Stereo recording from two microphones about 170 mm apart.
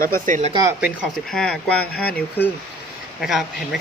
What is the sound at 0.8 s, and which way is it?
Speech, 5° right (ahead or behind).